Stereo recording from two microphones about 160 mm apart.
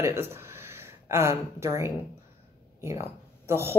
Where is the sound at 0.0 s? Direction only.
15° right (ahead or behind).